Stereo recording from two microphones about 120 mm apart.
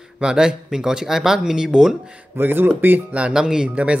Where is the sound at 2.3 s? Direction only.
15° right (ahead or behind).